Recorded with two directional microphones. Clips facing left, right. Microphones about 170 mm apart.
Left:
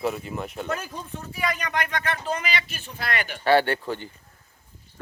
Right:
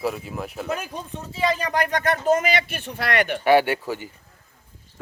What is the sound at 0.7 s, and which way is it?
Speech, 15° right (ahead or behind).